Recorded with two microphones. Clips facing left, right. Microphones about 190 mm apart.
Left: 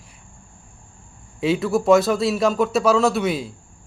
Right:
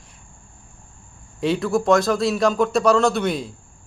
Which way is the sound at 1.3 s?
Centre (ahead or behind).